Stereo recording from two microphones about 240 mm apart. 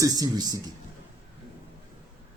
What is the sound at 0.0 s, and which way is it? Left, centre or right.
Speech, centre.